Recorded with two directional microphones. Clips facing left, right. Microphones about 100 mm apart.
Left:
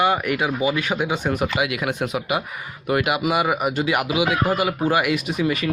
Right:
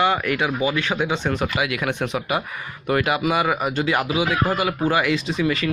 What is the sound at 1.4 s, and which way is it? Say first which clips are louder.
Speech: left 1 dB; 25° left (ahead or behind).